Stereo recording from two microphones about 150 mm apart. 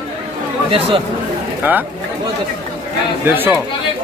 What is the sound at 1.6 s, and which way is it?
Speech, 10° right (ahead or behind).